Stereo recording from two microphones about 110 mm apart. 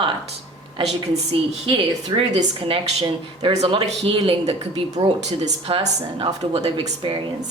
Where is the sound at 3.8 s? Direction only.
60° right (ahead or behind).